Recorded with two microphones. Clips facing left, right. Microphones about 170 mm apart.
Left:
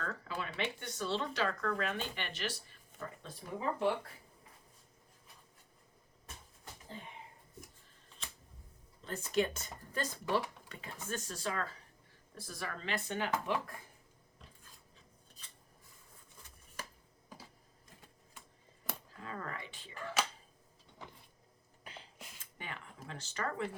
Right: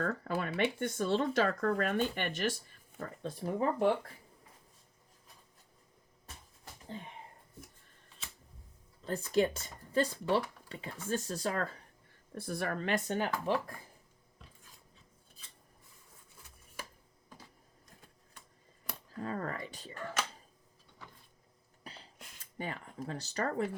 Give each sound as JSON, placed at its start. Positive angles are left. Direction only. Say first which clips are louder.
{"t": 0.0, "sound": "speech", "louder": "right 7 dB", "side_deg": -50}
{"t": 9.0, "sound": "speech", "louder": "right 4 dB", "side_deg": -35}
{"t": 12.3, "sound": "speech", "louder": "right 8 dB", "side_deg": -55}
{"t": 19.2, "sound": "speech", "louder": "right 7 dB", "side_deg": -40}
{"t": 21.0, "sound": "power windows", "louder": "left 3 dB", "side_deg": 20}
{"t": 22.5, "sound": "speech", "louder": "right 8 dB", "side_deg": -40}